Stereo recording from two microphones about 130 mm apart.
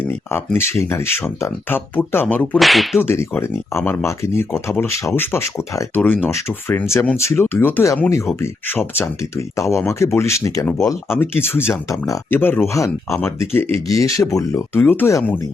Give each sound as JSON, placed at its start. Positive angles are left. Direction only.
{"t": 0.1, "sound": "speech", "side_deg": 20}
{"t": 2.6, "sound": "whip", "side_deg": 0}
{"t": 3.0, "sound": "speech", "side_deg": 15}